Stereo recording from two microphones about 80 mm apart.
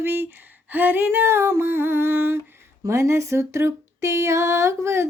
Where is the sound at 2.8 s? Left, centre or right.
Right.